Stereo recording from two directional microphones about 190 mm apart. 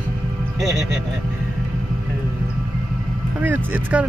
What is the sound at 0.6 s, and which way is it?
Speech, centre (ahead or behind).